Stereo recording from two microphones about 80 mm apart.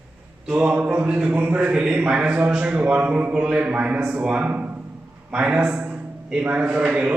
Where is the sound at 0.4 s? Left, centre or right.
Centre.